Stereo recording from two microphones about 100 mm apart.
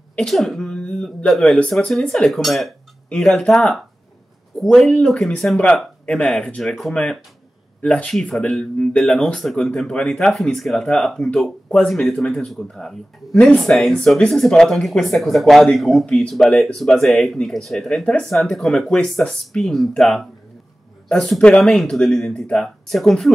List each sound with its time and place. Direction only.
0.1 s speech: 5° left (ahead or behind)